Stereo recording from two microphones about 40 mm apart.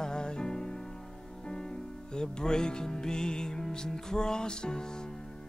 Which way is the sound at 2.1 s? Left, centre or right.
Centre.